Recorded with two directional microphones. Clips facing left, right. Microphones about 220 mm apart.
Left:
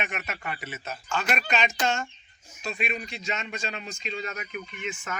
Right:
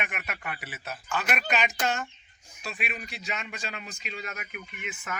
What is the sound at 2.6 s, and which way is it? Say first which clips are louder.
Speech: left 5 dB; 5° right (ahead or behind).